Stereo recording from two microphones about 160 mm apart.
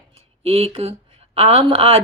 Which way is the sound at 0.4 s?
35° right (ahead or behind).